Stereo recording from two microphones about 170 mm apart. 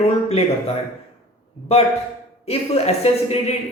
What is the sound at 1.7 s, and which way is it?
Speech, 35° left (ahead or behind).